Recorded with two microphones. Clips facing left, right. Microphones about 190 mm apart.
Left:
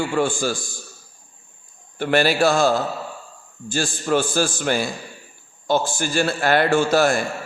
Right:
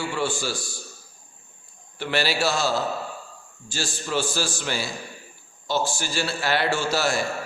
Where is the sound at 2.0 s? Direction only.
50° left (ahead or behind).